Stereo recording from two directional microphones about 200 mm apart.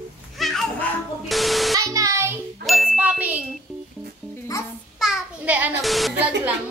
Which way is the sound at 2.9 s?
5° right (ahead or behind).